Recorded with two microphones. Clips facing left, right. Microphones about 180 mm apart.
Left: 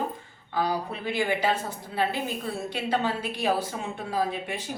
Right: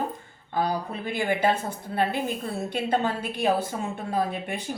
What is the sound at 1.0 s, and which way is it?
Speech, 50° right (ahead or behind).